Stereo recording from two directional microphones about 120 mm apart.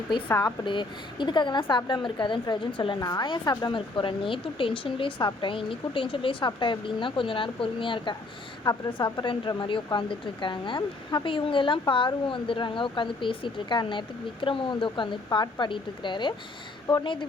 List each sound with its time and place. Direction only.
0.4 s speech: 40° left (ahead or behind)